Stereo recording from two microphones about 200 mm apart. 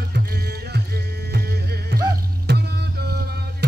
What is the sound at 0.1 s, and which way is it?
Music, 50° right (ahead or behind).